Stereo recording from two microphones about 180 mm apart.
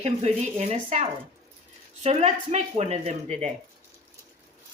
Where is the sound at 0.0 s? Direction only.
35° right (ahead or behind).